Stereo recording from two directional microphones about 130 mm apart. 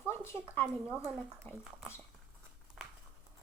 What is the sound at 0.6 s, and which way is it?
Speech, 5° right (ahead or behind).